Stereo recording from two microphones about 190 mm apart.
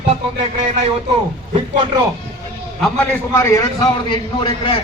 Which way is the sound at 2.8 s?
10° left (ahead or behind).